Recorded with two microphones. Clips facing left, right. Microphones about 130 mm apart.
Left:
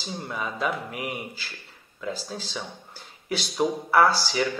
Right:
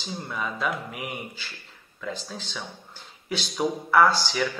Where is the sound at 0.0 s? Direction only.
Centre (ahead or behind).